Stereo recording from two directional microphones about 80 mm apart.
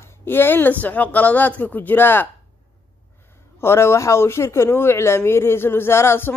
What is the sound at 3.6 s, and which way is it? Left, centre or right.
Speech, left.